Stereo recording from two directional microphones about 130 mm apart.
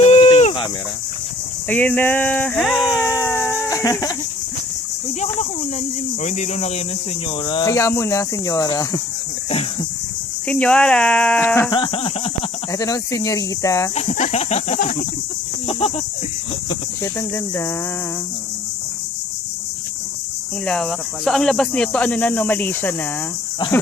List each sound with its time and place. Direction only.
0.0 s a sound: 50° left (ahead or behind)
1.6 s speech: 10° left (ahead or behind); by 3.0 s 5° right (ahead or behind)
3.0 s a sound: 25° left (ahead or behind)
3.2 s music: 10° left (ahead or behind)
3.7 s livestock: 25° left (ahead or behind)
6.2 s speech: 65° left (ahead or behind)
7.3 s speech: 35° left (ahead or behind)
7.7 s speech: 25° left (ahead or behind)
10.4 s speech: 10° left (ahead or behind)
11.7 s a sound: 40° left (ahead or behind)
12.7 s speech: 25° left (ahead or behind)
13.9 s speech: 60° left (ahead or behind)
17.0 s speech: 20° left (ahead or behind)
20.7 s speech: 5° left (ahead or behind)